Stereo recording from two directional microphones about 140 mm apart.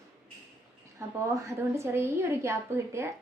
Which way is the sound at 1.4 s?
20° right (ahead or behind).